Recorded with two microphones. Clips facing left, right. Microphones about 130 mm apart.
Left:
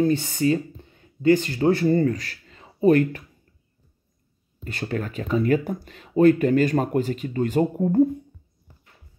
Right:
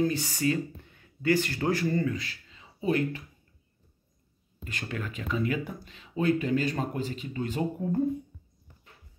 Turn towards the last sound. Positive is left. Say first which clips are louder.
# left 8 dB
turn(degrees=55)  # may be behind; listen again after turning